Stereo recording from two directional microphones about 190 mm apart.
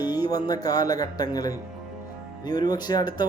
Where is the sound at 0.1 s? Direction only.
20° left (ahead or behind).